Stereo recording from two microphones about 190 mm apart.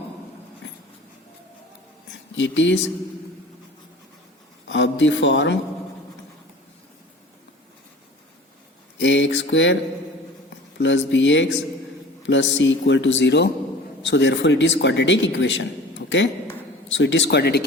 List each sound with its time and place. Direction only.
2.3 s speech: 75° left (ahead or behind)
4.7 s speech: 75° left (ahead or behind)
9.0 s speech: 70° left (ahead or behind)
10.8 s speech: 75° left (ahead or behind); by 17.6 s 60° left (ahead or behind)